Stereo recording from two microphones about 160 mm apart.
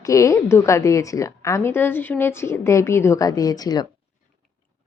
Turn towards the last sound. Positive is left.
turn(degrees=25)  # may be behind; listen again after turning